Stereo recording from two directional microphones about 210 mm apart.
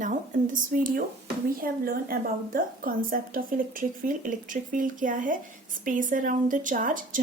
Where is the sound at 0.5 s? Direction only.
40° right (ahead or behind).